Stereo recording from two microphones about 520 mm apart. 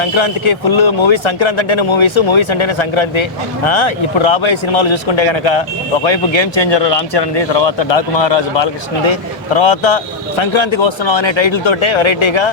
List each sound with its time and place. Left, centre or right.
0.0 s speech: left